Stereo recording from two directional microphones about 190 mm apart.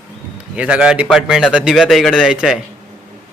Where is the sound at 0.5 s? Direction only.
5° right (ahead or behind).